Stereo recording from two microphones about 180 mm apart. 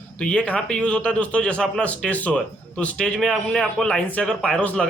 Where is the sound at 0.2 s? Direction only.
5° left (ahead or behind).